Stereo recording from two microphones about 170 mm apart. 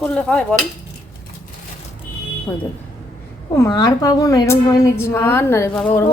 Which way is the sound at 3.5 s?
20° left (ahead or behind).